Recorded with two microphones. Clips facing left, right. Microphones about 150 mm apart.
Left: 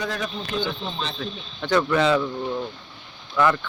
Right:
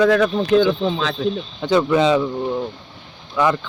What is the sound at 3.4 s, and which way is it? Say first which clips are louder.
Speech: right 2 dB; 25° right (ahead or behind).